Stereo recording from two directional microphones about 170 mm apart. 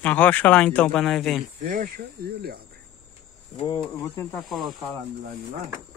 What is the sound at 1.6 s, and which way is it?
Speech, 55° right (ahead or behind).